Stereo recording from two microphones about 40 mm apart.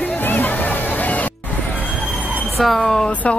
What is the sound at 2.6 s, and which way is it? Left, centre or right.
Speech, centre.